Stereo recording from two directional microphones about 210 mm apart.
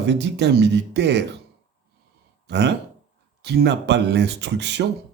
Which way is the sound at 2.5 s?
55° right (ahead or behind).